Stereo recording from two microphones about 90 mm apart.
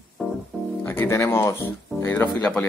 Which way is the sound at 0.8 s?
25° left (ahead or behind).